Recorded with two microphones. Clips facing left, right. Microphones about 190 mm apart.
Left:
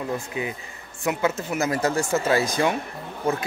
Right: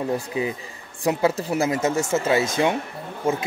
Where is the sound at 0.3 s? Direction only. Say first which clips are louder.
Right 4 dB; 25° right (ahead or behind).